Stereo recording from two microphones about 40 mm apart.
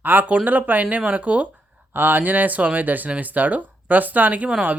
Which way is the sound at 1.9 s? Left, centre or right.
Right.